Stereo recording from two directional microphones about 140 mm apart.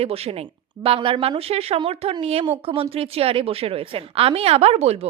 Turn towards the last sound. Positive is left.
turn(degrees=-50)  # may be behind; listen again after turning